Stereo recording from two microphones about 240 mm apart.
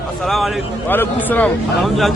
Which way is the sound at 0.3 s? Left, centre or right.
Centre.